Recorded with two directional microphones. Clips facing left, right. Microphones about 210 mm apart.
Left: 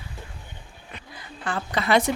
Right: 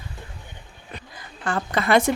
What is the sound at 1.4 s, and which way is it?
Speech, 50° right (ahead or behind).